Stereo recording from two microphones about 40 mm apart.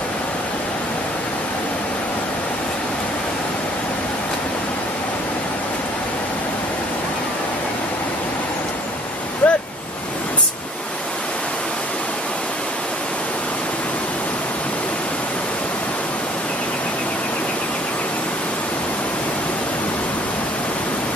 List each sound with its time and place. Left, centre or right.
9.4 s waves: left